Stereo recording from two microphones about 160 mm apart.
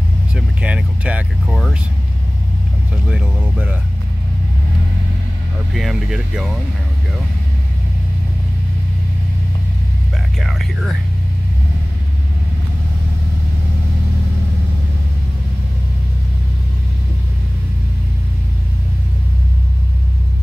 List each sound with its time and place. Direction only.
0.3 s speech: 5° right (ahead or behind)
3.1 s speech: 10° right (ahead or behind)
5.8 s speech: centre (ahead or behind)
10.4 s speech: centre (ahead or behind)